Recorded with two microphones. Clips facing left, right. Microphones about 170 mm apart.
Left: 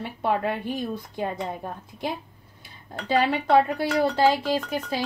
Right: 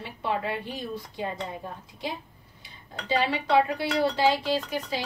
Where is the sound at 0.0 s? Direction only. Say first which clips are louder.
Left 5 dB; 50° left (ahead or behind).